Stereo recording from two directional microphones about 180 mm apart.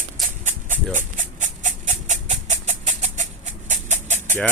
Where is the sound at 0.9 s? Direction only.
45° right (ahead or behind).